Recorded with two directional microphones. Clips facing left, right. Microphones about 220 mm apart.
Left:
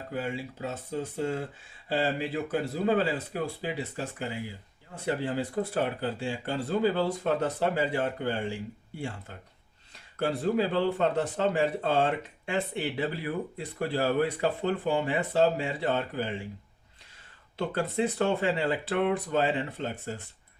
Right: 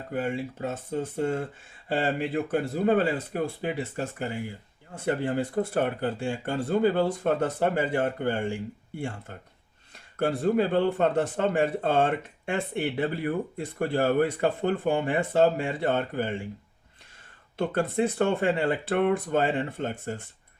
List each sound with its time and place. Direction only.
0.1 s a man's voice: 50° right (ahead or behind)
17.6 s a man's voice: 50° right (ahead or behind)